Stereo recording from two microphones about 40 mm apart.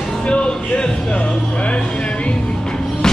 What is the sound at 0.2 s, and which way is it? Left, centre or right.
Speech, left.